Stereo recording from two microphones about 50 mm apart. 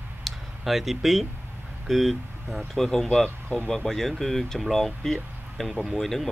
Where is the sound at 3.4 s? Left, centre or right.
Left.